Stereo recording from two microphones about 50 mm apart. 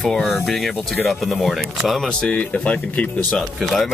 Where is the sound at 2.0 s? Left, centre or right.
Left.